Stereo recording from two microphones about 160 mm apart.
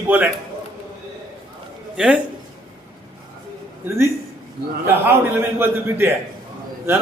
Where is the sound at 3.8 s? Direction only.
15° right (ahead or behind).